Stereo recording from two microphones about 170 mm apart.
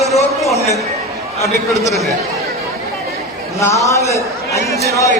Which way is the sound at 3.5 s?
20° left (ahead or behind).